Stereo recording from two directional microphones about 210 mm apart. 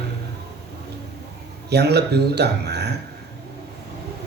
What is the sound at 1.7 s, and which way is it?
Speech, 50° right (ahead or behind).